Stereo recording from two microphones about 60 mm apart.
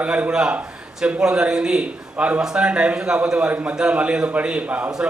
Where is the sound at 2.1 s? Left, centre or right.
Right.